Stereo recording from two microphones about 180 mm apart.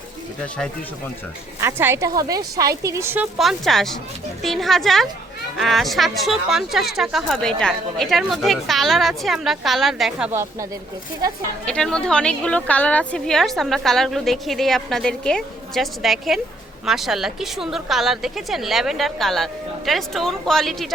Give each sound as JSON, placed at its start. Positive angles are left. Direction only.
{"t": 1.6, "sound": "a woman's voice", "side_deg": -15}
{"t": 3.3, "sound": "speech", "side_deg": 0}
{"t": 11.6, "sound": "speech", "side_deg": 5}